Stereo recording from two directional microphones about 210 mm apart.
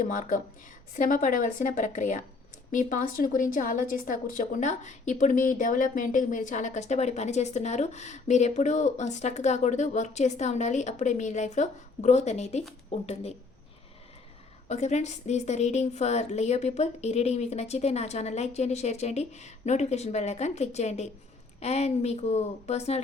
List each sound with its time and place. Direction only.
0.0 s a woman's voice: 40° left (ahead or behind)
14.7 s a woman's voice: 35° left (ahead or behind)